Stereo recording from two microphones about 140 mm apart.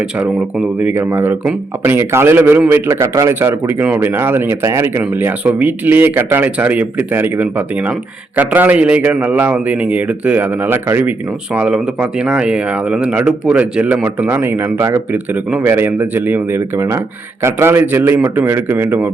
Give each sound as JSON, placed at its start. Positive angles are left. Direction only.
{"t": 0.2, "sound": "speech", "side_deg": -10}